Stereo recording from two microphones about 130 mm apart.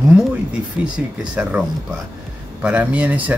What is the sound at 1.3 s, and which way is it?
Speech, 10° right (ahead or behind).